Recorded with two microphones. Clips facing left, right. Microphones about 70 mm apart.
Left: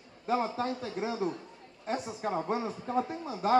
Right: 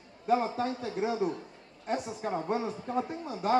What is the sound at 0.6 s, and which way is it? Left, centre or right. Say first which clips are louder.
Speech: right 2 dB; centre.